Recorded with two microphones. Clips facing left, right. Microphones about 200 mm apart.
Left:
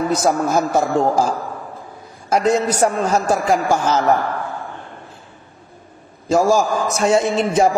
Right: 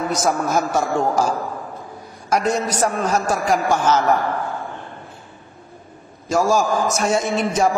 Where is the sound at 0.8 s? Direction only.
Centre (ahead or behind).